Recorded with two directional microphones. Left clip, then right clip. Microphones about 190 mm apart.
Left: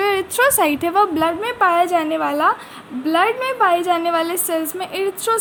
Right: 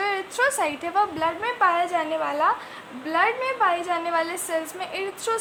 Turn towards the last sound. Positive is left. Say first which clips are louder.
# left 7 dB
turn(degrees=30)  # may be behind; listen again after turning